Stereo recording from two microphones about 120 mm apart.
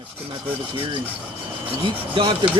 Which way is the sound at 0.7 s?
45° right (ahead or behind).